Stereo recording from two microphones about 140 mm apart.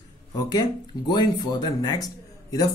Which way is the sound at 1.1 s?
30° left (ahead or behind).